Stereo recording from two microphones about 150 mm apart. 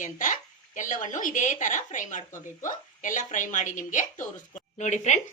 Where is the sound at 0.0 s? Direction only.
60° left (ahead or behind).